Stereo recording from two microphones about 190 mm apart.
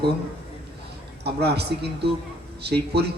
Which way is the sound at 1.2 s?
60° right (ahead or behind).